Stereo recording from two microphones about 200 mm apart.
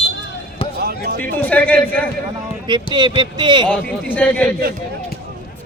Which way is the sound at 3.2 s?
20° right (ahead or behind).